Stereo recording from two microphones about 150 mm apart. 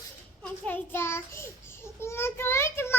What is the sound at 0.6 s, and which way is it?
A child's voice, 15° left (ahead or behind).